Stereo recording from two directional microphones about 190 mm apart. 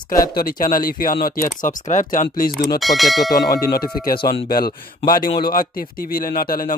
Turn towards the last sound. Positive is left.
turn(degrees=50)  # may be behind; listen again after turning